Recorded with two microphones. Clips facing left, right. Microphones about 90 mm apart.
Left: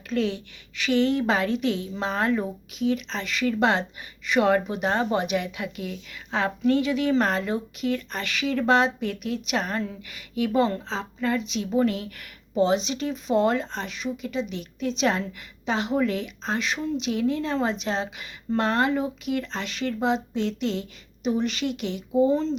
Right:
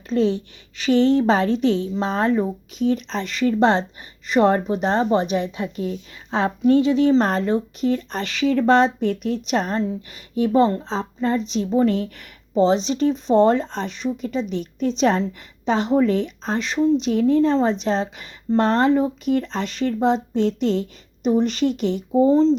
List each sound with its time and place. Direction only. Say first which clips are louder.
0.1 s a woman's voice: right 6 dB; 30° right (ahead or behind)